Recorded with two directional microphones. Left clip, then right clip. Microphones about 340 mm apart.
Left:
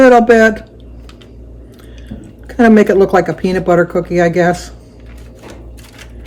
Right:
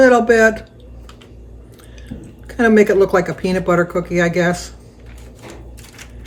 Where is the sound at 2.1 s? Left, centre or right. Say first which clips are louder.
Left 3 dB; centre.